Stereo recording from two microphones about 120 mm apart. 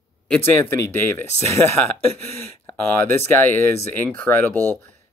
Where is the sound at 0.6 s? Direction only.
20° left (ahead or behind).